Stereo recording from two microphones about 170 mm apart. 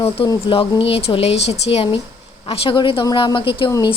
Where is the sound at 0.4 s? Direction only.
30° left (ahead or behind).